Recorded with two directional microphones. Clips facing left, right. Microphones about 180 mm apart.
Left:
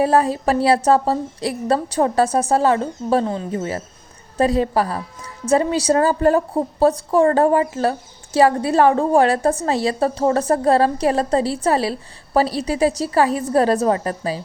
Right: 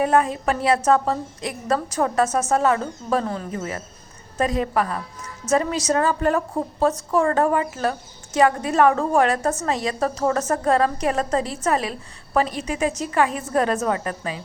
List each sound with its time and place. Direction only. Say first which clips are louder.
0.0 s a woman's voice: left 3 dB; 35° left (ahead or behind)